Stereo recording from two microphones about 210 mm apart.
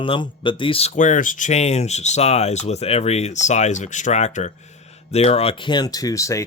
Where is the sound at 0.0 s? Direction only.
25° left (ahead or behind).